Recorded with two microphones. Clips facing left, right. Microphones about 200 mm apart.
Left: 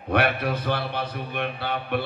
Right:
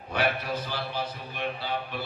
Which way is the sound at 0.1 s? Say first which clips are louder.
Left 5 dB; 60° left (ahead or behind).